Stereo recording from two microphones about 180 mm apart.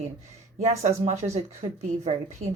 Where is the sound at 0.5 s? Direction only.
40° right (ahead or behind).